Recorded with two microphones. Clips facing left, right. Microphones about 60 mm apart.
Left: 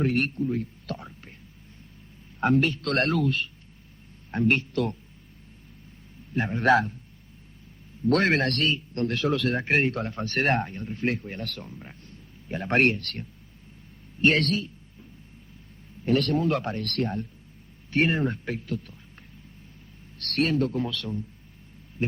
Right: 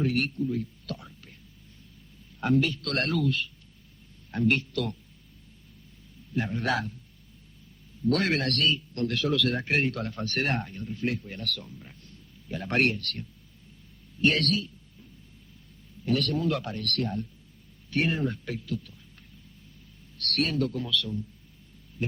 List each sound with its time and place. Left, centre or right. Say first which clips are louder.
0.0 s speech: left 2 dB; left
2.4 s a man's voice: left 3 dB; left
6.3 s a man's voice: left 7 dB; left
8.0 s a man's voice: left 4 dB; left
16.0 s a man's voice: left 3 dB; left
20.1 s a man's voice: left 3 dB; left